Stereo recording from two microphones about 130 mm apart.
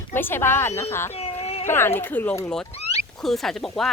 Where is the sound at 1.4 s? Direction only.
50° left (ahead or behind).